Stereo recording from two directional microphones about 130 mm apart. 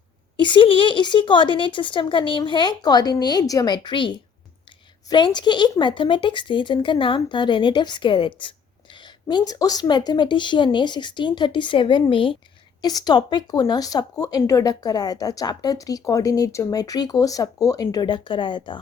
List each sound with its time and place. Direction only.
0.3 s speech: 40° left (ahead or behind)
12.8 s speech: 30° left (ahead or behind)